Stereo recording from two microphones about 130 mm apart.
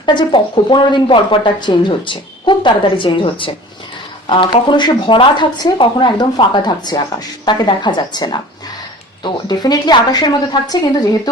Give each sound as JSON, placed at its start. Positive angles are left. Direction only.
{"t": 0.0, "sound": "a woman's voice", "side_deg": 35}